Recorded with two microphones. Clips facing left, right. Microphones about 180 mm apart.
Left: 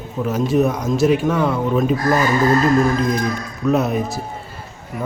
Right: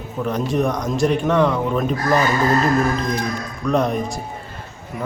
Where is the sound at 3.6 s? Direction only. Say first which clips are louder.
Left 2 dB; 5° left (ahead or behind).